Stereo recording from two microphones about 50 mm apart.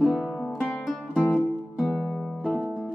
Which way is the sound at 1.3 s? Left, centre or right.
Centre.